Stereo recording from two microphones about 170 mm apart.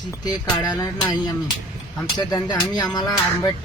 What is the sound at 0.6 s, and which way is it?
Speech, 20° left (ahead or behind).